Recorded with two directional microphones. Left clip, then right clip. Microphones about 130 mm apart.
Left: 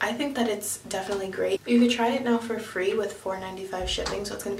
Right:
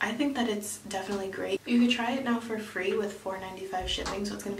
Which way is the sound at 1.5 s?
5° left (ahead or behind).